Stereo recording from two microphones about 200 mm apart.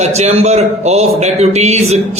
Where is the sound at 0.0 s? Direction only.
35° right (ahead or behind).